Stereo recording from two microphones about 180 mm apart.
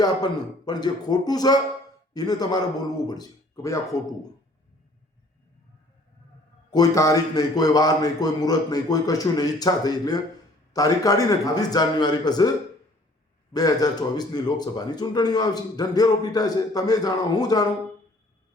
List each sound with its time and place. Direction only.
0.0 s speech: 20° left (ahead or behind)
6.7 s speech: 20° left (ahead or behind)